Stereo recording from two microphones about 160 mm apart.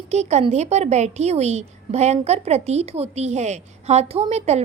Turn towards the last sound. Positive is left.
turn(degrees=-40)  # may be behind; listen again after turning